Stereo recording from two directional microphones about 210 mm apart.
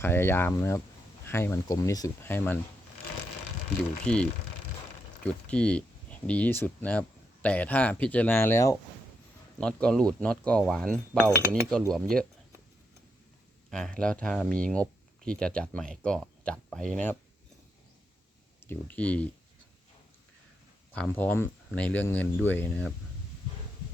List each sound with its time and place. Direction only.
0.0 s speech: 10° left (ahead or behind)
4.0 s speech: 5° left (ahead or behind)
13.7 s speech: 5° left (ahead or behind)
18.6 s speech: 10° left (ahead or behind)
20.9 s speech: 5° left (ahead or behind)